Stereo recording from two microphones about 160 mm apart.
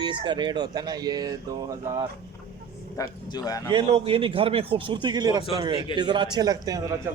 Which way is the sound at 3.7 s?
35° right (ahead or behind).